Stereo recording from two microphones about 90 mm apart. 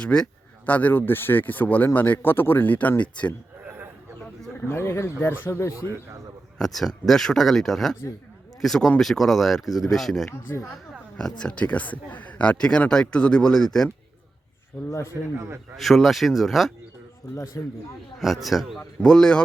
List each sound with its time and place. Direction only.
0.0 s speech: 10° left (ahead or behind)
3.6 s a sound: 20° right (ahead or behind)
4.7 s speech: 30° left (ahead or behind)
6.6 s speech: 5° left (ahead or behind)
10.2 s speech: 30° left (ahead or behind)
11.2 s speech: 10° left (ahead or behind)
14.8 s speech: 35° left (ahead or behind)
15.4 s a man's voice: 25° right (ahead or behind)
15.7 s speech: centre (ahead or behind)
17.3 s speech: 35° left (ahead or behind)
18.2 s speech: centre (ahead or behind)